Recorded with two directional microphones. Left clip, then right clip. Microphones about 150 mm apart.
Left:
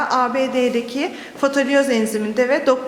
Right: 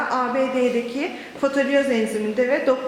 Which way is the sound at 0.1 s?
20° left (ahead or behind).